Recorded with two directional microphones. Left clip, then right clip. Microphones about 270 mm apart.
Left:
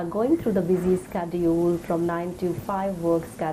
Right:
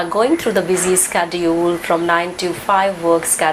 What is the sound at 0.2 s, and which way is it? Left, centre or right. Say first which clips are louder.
A woman's voice: right 7 dB; centre.